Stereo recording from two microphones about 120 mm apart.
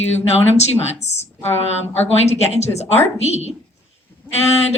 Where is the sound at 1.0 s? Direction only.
65° left (ahead or behind).